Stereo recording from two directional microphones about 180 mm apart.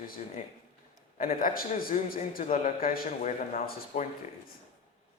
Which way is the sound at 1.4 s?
50° left (ahead or behind).